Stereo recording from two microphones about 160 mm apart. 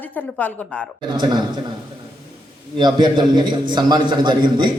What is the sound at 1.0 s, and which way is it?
Speech, 30° right (ahead or behind).